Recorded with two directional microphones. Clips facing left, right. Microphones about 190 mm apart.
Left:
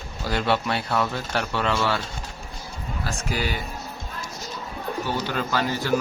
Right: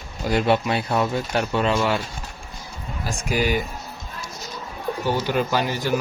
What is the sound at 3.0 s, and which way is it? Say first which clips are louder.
Speech: right 5 dB; 15° right (ahead or behind).